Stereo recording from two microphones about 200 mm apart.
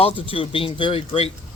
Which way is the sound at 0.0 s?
25° left (ahead or behind).